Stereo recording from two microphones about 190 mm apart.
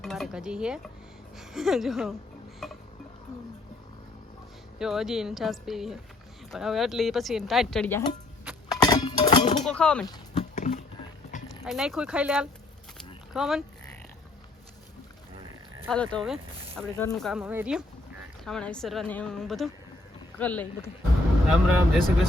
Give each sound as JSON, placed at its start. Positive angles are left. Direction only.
{"t": 0.0, "sound": "dishes", "side_deg": 0}
{"t": 1.4, "sound": "a woman's voice", "side_deg": 0}
{"t": 2.6, "sound": "a sound", "side_deg": 0}
{"t": 4.8, "sound": "a woman's voice", "side_deg": 0}
{"t": 8.7, "sound": "music", "side_deg": 20}
{"t": 9.6, "sound": "a woman's voice", "side_deg": 5}
{"t": 10.5, "sound": "a sound", "side_deg": 40}
{"t": 11.6, "sound": "a woman's voice", "side_deg": 0}
{"t": 13.3, "sound": "oink", "side_deg": 0}
{"t": 16.1, "sound": "a woman's voice", "side_deg": 5}
{"t": 17.4, "sound": "speech", "side_deg": -10}
{"t": 18.4, "sound": "a woman's voice", "side_deg": 5}